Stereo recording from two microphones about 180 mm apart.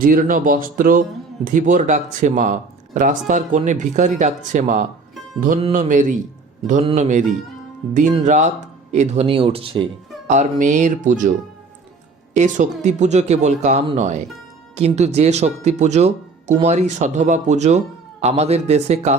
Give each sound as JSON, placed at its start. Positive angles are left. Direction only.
{"t": 0.0, "sound": "speech", "side_deg": -50}
{"t": 10.2, "sound": "speech", "side_deg": -45}